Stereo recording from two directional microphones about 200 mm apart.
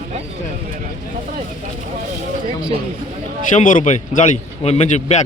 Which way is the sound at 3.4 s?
40° left (ahead or behind).